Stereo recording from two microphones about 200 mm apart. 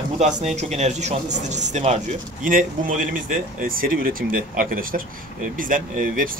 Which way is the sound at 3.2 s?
45° right (ahead or behind).